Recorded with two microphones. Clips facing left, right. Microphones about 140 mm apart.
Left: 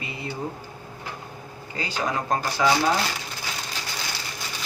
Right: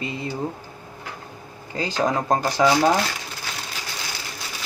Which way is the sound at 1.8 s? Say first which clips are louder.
Right 5 dB; 35° right (ahead or behind).